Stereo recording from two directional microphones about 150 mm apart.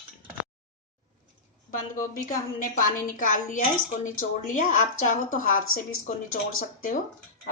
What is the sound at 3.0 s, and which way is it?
Speech, 60° left (ahead or behind).